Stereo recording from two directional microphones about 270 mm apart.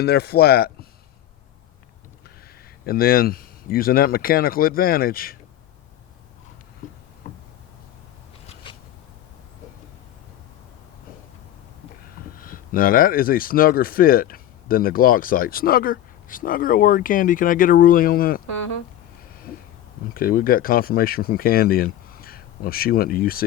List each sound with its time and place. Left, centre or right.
0.0 s speech: left
2.8 s speech: left
8.7 s shuffling cards: centre
12.4 s speech: left
20.1 s speech: left